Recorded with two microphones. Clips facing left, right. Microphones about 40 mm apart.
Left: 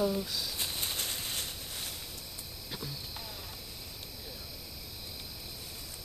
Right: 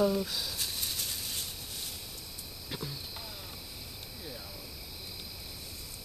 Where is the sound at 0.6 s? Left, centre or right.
Left.